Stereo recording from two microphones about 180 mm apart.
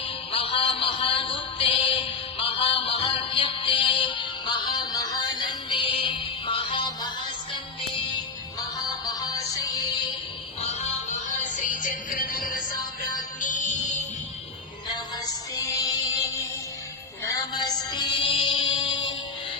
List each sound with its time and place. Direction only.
0.0 s music: 30° left (ahead or behind)
9.2 s music: 20° left (ahead or behind)
10.6 s music: 35° left (ahead or behind)
13.4 s music: 45° left (ahead or behind)
15.5 s music: 20° left (ahead or behind)